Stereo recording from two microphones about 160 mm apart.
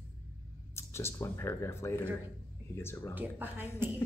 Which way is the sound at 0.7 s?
15° left (ahead or behind).